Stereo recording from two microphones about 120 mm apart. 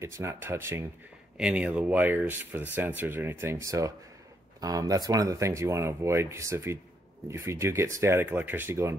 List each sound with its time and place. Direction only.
0.0 s speech: 25° right (ahead or behind)
1.4 s speech: 10° right (ahead or behind)